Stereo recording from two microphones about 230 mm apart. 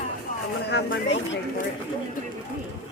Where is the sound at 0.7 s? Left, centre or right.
Left.